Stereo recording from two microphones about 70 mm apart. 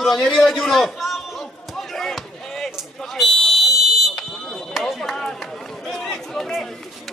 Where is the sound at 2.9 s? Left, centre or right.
Centre.